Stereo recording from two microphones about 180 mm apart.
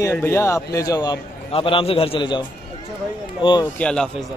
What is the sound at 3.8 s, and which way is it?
Speech, 5° left (ahead or behind).